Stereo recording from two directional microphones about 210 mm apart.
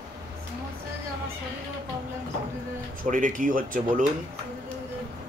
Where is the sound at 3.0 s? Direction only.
35° right (ahead or behind).